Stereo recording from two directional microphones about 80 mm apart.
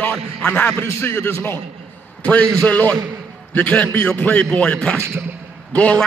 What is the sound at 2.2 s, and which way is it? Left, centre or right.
A man's voice, centre.